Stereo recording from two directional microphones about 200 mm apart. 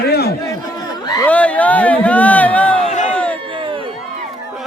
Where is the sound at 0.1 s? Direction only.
50° left (ahead or behind).